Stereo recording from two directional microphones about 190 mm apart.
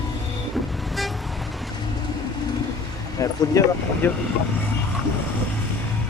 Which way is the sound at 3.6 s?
15° left (ahead or behind).